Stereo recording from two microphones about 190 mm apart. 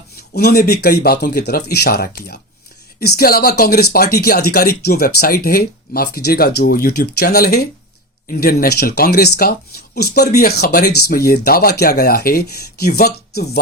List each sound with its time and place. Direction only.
0.2 s speech: 55° left (ahead or behind)